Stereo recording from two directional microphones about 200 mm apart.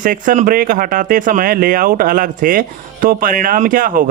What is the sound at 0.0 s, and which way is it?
Speech, 40° right (ahead or behind).